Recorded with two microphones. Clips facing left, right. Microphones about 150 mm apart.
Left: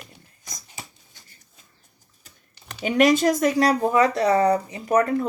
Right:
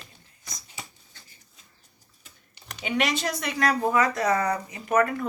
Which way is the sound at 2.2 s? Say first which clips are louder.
Left 1 dB; 40° left (ahead or behind).